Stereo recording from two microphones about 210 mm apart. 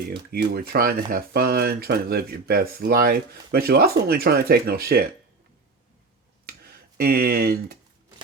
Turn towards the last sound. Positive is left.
turn(degrees=-45)  # may be behind; listen again after turning